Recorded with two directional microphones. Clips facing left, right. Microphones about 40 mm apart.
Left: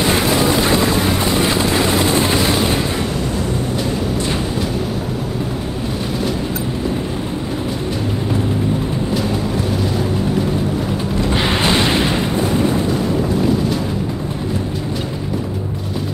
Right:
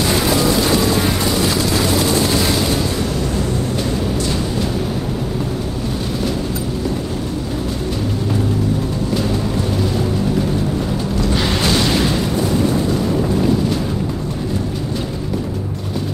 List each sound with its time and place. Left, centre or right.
0.0 s music: left
11.1 s music: left